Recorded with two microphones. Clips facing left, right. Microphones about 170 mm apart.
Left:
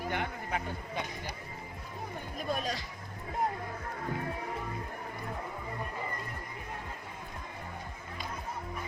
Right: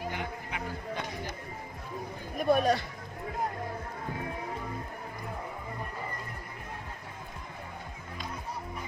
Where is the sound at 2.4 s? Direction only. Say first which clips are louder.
Right 10 dB; 60° right (ahead or behind).